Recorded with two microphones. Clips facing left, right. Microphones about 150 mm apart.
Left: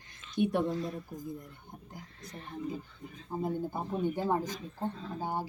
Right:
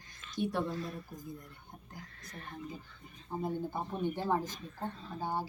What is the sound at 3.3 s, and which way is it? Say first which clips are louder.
Speech: left 2 dB; 10° left (ahead or behind).